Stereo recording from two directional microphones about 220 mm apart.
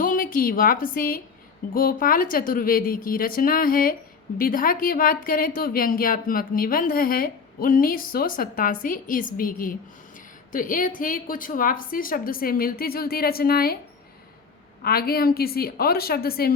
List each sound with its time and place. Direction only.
0.0 s a woman's voice: 40° left (ahead or behind)
14.8 s a woman's voice: 45° left (ahead or behind)